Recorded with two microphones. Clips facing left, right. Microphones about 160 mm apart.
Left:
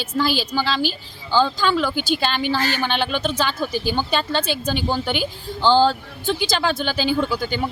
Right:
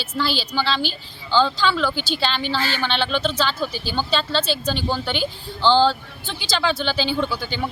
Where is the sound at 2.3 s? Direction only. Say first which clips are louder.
Left 3 dB; 10° left (ahead or behind).